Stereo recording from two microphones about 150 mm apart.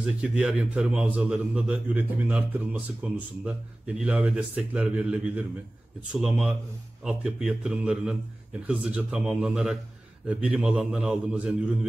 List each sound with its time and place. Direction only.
0.0 s a man's voice: 5° right (ahead or behind)